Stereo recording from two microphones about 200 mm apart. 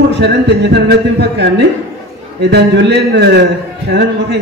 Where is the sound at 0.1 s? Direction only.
60° right (ahead or behind).